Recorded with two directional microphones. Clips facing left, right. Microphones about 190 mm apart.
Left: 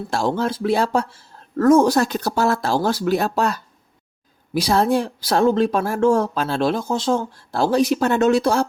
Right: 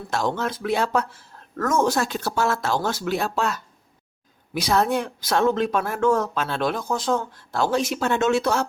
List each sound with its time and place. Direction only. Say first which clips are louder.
0.1 s speech: left 3 dB; 30° left (ahead or behind)